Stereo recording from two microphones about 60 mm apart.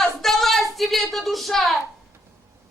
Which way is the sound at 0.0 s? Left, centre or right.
Centre.